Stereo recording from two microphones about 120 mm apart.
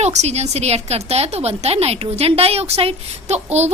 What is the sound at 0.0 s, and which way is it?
A woman's voice, 65° right (ahead or behind).